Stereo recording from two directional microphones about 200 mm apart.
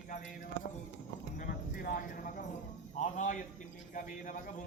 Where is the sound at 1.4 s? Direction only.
45° left (ahead or behind).